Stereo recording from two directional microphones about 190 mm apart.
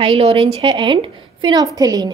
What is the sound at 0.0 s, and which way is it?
A woman's voice, 30° right (ahead or behind).